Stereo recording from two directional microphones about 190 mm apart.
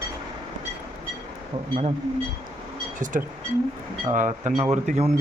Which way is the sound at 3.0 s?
40° right (ahead or behind).